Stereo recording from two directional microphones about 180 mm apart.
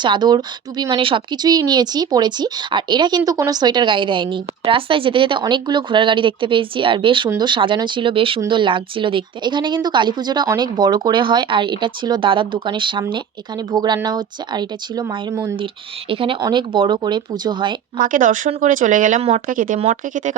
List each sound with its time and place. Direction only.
0.0 s speech: 25° right (ahead or behind)
15.5 s speech: 30° right (ahead or behind)
17.9 s speech: 50° right (ahead or behind)